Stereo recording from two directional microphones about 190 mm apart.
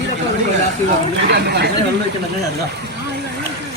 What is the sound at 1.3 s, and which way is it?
Speech, 60° right (ahead or behind).